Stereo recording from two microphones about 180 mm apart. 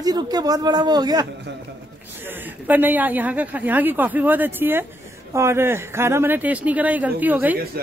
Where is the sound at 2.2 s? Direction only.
10° right (ahead or behind).